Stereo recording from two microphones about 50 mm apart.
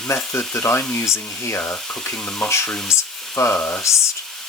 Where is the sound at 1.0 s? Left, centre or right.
Left.